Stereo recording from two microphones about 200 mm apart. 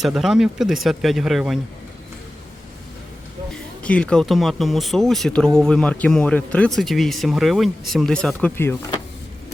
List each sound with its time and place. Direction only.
0.0 s speech: centre (ahead or behind)
3.5 s speech: 5° left (ahead or behind)